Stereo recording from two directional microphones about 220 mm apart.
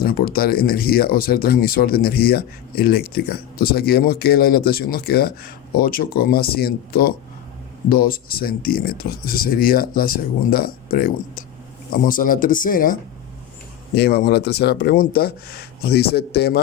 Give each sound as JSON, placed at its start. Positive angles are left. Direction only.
{"t": 0.0, "sound": "speech", "side_deg": 40}